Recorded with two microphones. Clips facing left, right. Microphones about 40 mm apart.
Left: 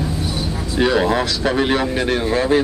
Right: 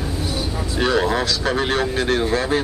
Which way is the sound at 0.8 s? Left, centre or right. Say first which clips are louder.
Left 3 dB; centre.